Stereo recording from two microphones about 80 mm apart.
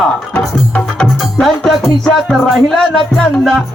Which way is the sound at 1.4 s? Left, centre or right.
Centre.